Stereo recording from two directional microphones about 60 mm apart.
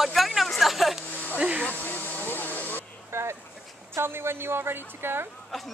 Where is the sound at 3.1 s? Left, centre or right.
Right.